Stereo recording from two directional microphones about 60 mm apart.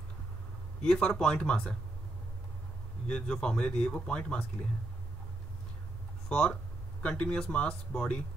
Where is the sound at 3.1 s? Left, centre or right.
Centre.